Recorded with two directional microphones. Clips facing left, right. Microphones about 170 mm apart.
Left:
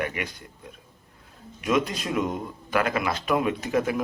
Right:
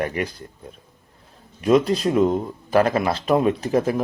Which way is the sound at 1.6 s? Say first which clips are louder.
Right 7 dB; 35° right (ahead or behind).